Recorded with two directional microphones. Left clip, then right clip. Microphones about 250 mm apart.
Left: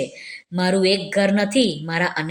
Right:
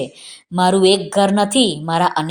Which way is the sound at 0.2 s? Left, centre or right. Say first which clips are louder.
Right 7 dB; centre.